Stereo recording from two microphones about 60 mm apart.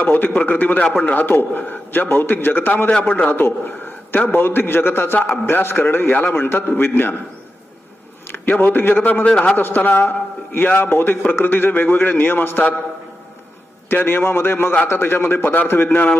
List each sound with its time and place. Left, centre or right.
0.0 s a man's voice: left
8.3 s a man's voice: left
13.9 s a man's voice: left